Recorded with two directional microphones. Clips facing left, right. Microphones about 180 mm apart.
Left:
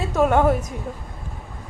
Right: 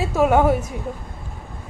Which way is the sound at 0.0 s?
5° right (ahead or behind).